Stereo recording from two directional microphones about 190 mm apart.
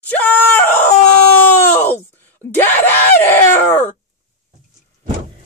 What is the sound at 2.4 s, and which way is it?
Screaming, 10° left (ahead or behind).